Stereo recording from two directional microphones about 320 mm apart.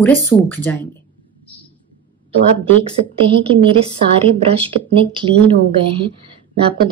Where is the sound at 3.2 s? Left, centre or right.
Centre.